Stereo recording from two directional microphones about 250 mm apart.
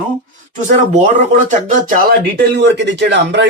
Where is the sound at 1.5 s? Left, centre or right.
Right.